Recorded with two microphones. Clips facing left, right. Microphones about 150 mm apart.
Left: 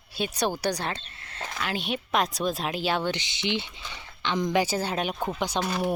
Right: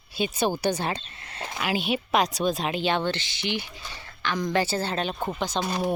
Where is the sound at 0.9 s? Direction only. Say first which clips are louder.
Right 2 dB; 15° right (ahead or behind); by 5.6 s 10° left (ahead or behind).